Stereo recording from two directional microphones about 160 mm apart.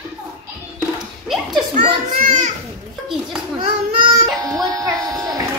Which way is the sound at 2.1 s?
55° right (ahead or behind).